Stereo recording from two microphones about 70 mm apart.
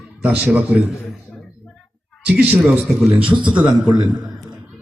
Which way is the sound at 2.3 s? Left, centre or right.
Right.